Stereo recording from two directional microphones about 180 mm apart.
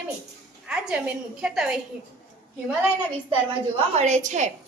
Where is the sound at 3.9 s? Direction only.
40° right (ahead or behind).